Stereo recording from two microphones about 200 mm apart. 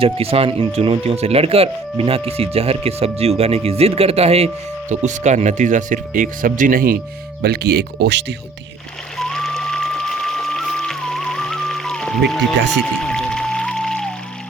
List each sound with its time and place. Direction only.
0.0 s speech: 30° right (ahead or behind); by 8.2 s 55° right (ahead or behind)
9.1 s music: centre (ahead or behind)